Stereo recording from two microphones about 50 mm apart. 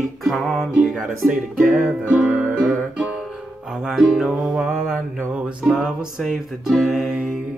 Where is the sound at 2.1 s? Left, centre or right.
Right.